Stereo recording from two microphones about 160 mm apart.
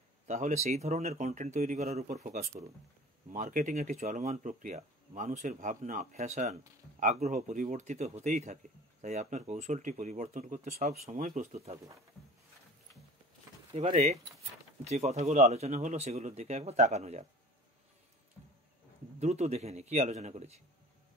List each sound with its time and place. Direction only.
0.3 s speech: 50° right (ahead or behind)
11.5 s speech: 40° right (ahead or behind)
13.7 s speech: 40° right (ahead or behind)
19.1 s speech: 45° right (ahead or behind)